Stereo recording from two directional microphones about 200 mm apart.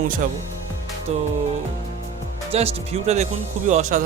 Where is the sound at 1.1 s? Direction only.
30° right (ahead or behind).